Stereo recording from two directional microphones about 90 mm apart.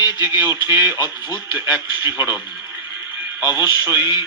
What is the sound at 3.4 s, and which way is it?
Speech, 20° right (ahead or behind).